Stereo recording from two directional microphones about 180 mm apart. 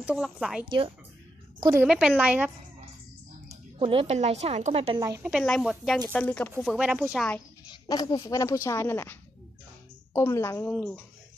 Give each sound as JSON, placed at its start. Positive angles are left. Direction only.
{"t": 0.0, "sound": "speech", "side_deg": -5}
{"t": 0.7, "sound": "speech", "side_deg": -30}
{"t": 1.8, "sound": "speech", "side_deg": -5}
{"t": 3.8, "sound": "a woman's voice", "side_deg": -30}
{"t": 5.2, "sound": "speech", "side_deg": 0}
{"t": 6.6, "sound": "speech", "side_deg": -5}
{"t": 7.6, "sound": "speech", "side_deg": 20}